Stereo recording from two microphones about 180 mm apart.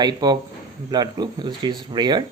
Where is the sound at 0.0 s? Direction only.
25° right (ahead or behind).